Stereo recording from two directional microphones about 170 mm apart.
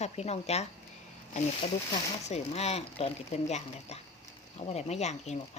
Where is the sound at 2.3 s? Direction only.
40° left (ahead or behind).